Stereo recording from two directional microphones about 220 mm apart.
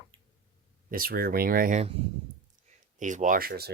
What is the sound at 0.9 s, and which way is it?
Speech, 40° right (ahead or behind).